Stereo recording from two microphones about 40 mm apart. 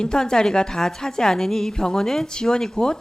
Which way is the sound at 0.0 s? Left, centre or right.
Centre.